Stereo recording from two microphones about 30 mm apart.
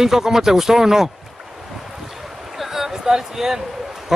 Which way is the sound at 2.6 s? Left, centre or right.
Centre.